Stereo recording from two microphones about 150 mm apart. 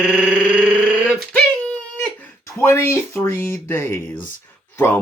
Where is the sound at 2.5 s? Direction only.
15° left (ahead or behind).